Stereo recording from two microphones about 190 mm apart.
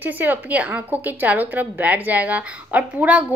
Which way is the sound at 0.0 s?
10° right (ahead or behind).